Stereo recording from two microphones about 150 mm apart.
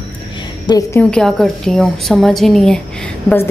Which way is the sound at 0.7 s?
20° left (ahead or behind).